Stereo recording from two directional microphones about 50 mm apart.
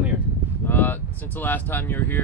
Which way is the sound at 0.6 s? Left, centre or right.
Left.